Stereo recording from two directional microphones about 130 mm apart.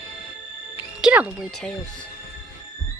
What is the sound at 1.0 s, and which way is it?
Music, 10° right (ahead or behind).